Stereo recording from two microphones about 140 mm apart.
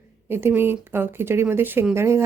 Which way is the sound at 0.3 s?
15° right (ahead or behind).